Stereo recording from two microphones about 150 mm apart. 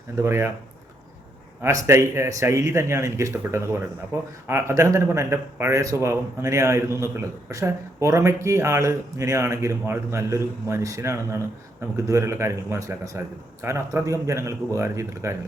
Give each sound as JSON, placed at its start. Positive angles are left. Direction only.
{"t": 0.2, "sound": "speech", "side_deg": -15}
{"t": 1.6, "sound": "speech", "side_deg": -20}